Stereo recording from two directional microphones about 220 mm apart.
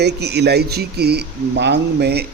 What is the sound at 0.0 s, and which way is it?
Speech, 50° right (ahead or behind).